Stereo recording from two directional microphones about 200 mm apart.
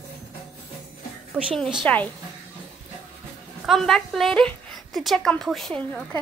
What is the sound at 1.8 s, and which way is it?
Speech, 10° left (ahead or behind).